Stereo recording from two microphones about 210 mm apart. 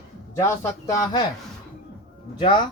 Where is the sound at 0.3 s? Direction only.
15° left (ahead or behind).